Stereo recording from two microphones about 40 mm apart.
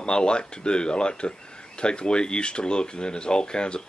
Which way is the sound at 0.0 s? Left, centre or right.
Left.